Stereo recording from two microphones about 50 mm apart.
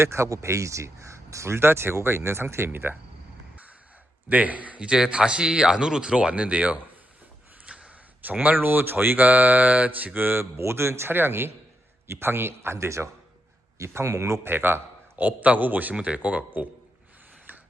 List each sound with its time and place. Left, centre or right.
0.0 s speech: right
1.5 s speech: right
4.3 s speech: right
7.6 s gasp: right
8.2 s speech: right
8.5 s speech: right
10.6 s speech: right
11.1 s speech: right
14.4 s speech: right
15.1 s speech: right
16.0 s speech: right